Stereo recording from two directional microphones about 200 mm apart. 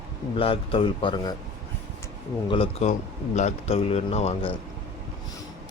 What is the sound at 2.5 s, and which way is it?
A man's voice, 30° left (ahead or behind).